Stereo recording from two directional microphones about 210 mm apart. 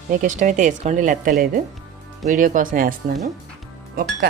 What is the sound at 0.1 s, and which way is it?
A woman's voice, 35° right (ahead or behind).